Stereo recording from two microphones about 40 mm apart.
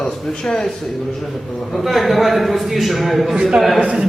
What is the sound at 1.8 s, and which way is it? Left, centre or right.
A man's voice, centre.